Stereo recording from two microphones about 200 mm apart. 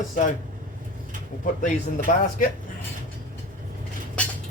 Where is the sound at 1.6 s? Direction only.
40° left (ahead or behind).